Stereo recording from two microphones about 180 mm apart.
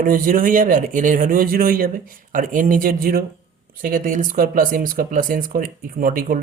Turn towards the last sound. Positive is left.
turn(degrees=-50)  # may be behind; listen again after turning